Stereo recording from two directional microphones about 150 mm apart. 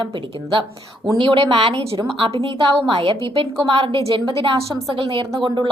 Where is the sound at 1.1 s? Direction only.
35° right (ahead or behind).